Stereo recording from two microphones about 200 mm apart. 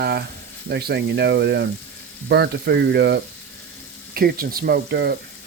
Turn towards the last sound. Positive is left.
turn(degrees=-55)  # may be behind; listen again after turning